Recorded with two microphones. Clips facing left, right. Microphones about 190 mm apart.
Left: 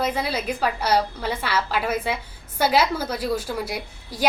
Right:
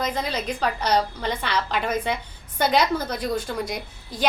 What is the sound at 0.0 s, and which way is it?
A woman's voice, 10° left (ahead or behind).